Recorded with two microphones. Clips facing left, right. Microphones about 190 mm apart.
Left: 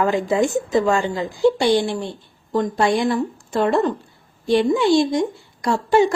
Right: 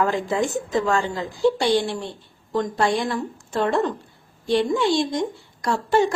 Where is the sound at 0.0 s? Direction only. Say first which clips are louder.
Left 4 dB; 15° left (ahead or behind).